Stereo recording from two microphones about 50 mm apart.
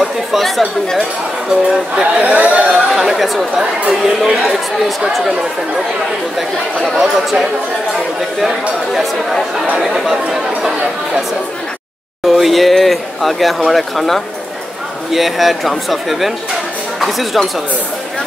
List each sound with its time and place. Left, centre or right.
0.3 s speech: centre
1.5 s speech: centre
2.2 s speech: right
2.9 s speech: centre
8.4 s speech: centre
12.3 s speech: centre